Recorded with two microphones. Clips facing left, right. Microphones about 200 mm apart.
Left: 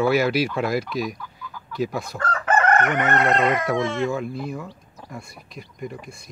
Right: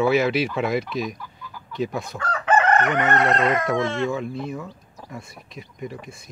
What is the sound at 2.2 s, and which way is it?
Chicken, 50° left (ahead or behind).